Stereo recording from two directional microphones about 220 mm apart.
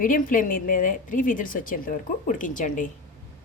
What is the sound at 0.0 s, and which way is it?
A woman's voice, 40° left (ahead or behind).